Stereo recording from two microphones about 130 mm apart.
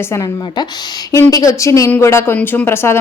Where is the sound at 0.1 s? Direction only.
25° left (ahead or behind).